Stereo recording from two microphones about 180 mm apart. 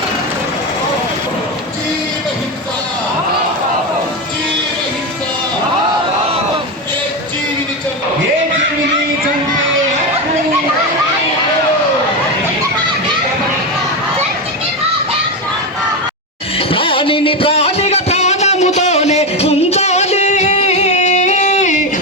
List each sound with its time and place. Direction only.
16.6 s music: 30° left (ahead or behind)